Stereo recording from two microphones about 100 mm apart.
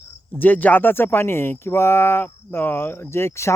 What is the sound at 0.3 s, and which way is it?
Speech, 15° left (ahead or behind).